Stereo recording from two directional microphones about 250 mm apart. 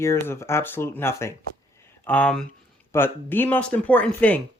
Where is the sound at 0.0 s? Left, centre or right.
Centre.